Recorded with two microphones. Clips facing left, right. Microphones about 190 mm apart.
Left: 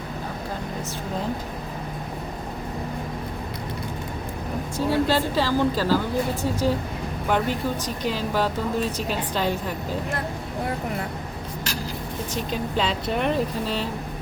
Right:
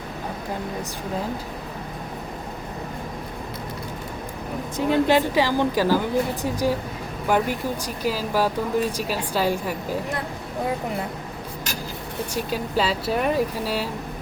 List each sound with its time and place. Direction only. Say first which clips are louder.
4.9 s speech: right 3 dB; 15° right (ahead or behind)
12.3 s speech: right 1 dB; 10° right (ahead or behind)